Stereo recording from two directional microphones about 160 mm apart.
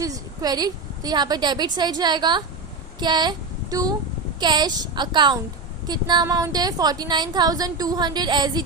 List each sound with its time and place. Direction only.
0.0 s a woman's voice: 25° right (ahead or behind)
3.0 s a sound: 25° right (ahead or behind)
4.4 s a woman's voice: 25° right (ahead or behind)